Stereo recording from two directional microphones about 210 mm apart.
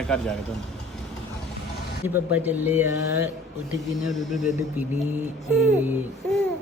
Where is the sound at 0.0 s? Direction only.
5° left (ahead or behind).